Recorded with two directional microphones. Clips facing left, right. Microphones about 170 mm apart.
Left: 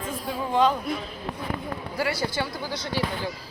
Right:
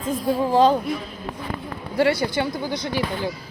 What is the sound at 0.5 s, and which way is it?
Speech, 30° right (ahead or behind).